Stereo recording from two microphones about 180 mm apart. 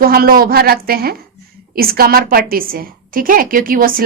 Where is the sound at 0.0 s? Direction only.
55° right (ahead or behind).